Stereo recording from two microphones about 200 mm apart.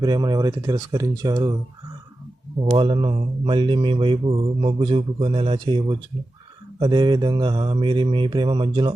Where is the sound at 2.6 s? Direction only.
25° right (ahead or behind).